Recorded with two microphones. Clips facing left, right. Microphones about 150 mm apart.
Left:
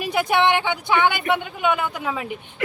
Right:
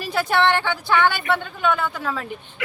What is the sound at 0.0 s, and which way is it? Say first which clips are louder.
Speech: left 1 dB; 15° left (ahead or behind).